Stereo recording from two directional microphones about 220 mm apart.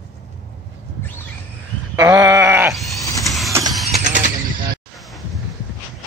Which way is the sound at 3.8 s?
30° right (ahead or behind).